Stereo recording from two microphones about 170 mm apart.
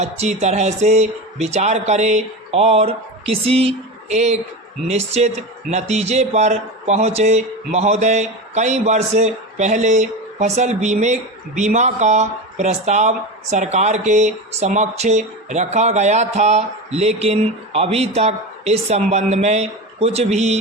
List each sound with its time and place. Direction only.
0.0 s speech: 40° right (ahead or behind)